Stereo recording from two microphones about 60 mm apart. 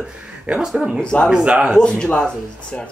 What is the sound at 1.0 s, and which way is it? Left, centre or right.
Speech, centre.